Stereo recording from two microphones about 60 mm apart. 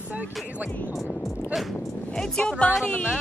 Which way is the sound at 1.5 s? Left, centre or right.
Centre.